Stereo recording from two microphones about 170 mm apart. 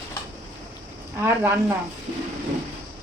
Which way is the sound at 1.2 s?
15° right (ahead or behind).